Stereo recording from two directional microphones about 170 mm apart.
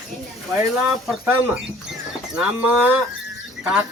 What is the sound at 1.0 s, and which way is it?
Speech, 5° right (ahead or behind).